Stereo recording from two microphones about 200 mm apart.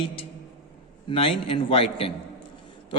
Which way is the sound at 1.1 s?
25° left (ahead or behind).